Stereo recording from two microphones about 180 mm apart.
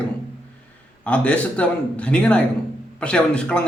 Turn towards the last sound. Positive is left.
turn(degrees=5)  # may be behind; listen again after turning